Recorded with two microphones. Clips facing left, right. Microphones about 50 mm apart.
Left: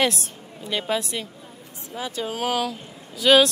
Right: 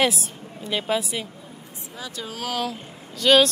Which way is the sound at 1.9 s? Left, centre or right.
Left.